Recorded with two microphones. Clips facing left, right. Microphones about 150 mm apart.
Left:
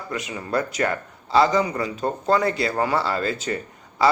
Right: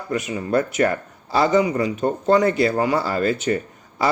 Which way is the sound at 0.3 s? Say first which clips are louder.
Right 4 dB; 25° right (ahead or behind).